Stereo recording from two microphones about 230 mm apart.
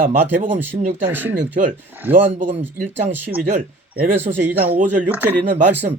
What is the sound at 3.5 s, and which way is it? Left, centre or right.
Speech, right.